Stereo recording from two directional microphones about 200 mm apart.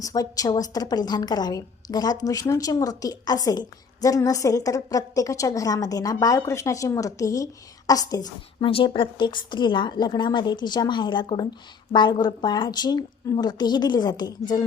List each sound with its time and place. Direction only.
0.0 s a woman's voice: 15° left (ahead or behind)